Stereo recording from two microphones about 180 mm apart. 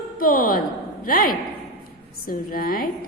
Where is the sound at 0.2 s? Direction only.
55° left (ahead or behind).